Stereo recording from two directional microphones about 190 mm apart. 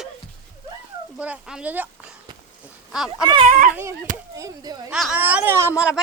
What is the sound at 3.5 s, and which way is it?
Speech, 45° right (ahead or behind).